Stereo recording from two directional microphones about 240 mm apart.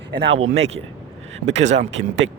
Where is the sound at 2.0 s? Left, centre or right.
Right.